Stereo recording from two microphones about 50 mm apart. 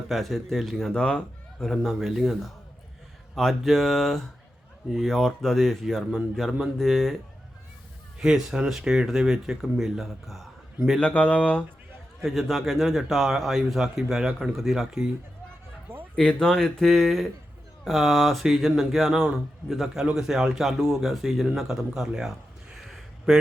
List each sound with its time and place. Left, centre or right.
0.1 s a man's voice: centre
0.9 s speech: centre
1.6 s a man's voice: centre
3.3 s a man's voice: centre
8.2 s speech: centre
11.0 s speech: left
12.2 s a man's voice: centre
16.2 s a man's voice: centre